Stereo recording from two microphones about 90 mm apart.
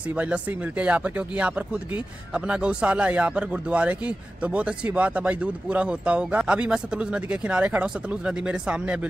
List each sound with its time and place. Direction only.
0.1 s a man's voice: 15° right (ahead or behind)